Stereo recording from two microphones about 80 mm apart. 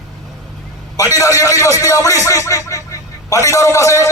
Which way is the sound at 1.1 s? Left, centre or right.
Left.